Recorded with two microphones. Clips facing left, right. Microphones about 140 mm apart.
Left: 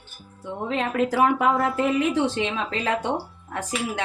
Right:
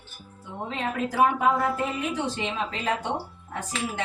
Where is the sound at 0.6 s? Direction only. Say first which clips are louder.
Left 6 dB; 90° left.